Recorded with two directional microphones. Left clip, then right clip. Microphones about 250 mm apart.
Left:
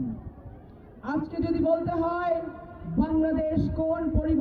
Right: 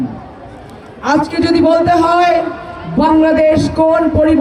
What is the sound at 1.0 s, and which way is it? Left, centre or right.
A man's voice, right.